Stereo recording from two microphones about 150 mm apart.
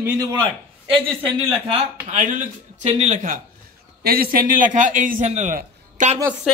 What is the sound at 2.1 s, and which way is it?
A man's voice, 60° right (ahead or behind).